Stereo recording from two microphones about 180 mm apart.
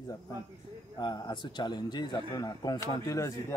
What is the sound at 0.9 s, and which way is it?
A man's voice, 25° left (ahead or behind).